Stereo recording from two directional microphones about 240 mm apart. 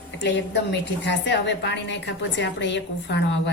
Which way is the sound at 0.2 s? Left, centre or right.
Left.